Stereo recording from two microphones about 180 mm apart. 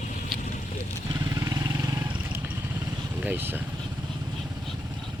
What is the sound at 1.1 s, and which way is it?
Vehicle, 20° right (ahead or behind).